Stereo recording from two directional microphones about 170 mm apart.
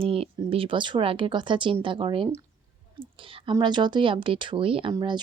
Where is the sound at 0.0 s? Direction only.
35° right (ahead or behind).